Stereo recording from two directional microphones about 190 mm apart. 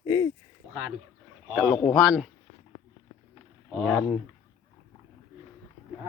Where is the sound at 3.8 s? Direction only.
5° left (ahead or behind).